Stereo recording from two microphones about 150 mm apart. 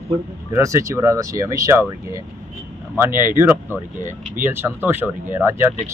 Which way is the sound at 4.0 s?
55° right (ahead or behind).